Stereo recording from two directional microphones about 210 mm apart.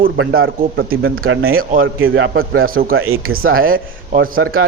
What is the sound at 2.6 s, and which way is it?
Speech, 45° right (ahead or behind).